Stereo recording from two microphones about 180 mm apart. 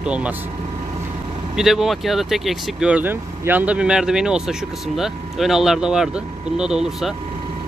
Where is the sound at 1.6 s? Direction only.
Centre (ahead or behind).